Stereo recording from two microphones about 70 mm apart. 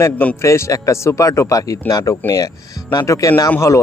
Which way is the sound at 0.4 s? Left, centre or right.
Left.